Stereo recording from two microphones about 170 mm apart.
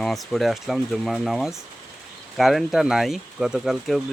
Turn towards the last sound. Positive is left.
turn(degrees=0)  # may be behind; listen again after turning